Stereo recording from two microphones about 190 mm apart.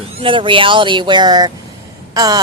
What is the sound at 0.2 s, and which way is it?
Speech, 25° right (ahead or behind).